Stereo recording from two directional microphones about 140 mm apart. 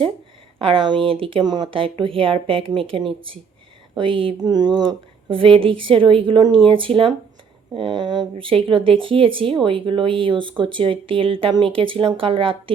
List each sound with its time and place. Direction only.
0.6 s speech: 40° right (ahead or behind)